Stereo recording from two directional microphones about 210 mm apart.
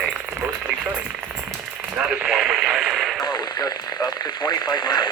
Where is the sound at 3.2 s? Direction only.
20° left (ahead or behind).